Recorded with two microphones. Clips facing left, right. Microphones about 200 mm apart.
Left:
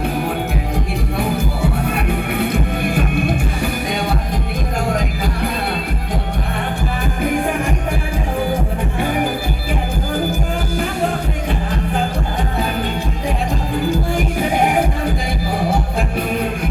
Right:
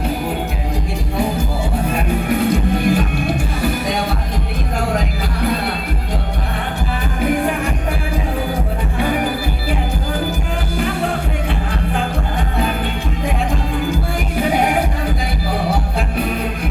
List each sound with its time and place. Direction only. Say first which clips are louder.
2.9 s music: even; 55° left (ahead or behind)